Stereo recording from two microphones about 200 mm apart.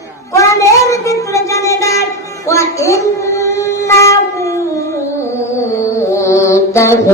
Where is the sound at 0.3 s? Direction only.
15° left (ahead or behind).